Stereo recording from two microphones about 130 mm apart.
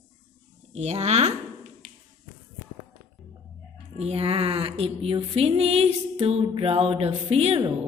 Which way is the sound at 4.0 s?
50° right (ahead or behind).